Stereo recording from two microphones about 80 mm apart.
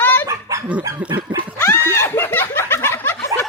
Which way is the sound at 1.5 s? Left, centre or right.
Left.